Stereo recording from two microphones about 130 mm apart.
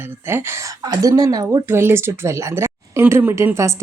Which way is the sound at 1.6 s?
20° right (ahead or behind).